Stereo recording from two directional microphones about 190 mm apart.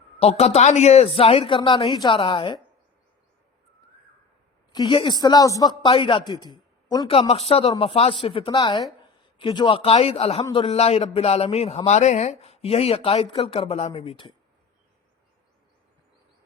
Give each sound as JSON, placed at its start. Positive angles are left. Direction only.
{"t": 0.2, "sound": "speech", "side_deg": 35}
{"t": 4.7, "sound": "a man's voice", "side_deg": 25}